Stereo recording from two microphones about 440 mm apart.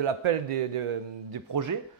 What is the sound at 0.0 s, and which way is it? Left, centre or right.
Speech, right.